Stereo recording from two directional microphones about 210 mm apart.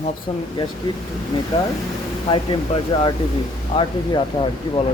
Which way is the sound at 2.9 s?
20° left (ahead or behind).